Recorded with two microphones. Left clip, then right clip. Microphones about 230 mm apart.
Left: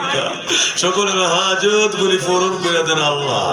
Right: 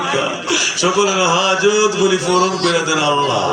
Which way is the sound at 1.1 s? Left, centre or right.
Left.